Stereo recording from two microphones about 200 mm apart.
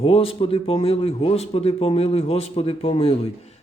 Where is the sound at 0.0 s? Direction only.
30° left (ahead or behind).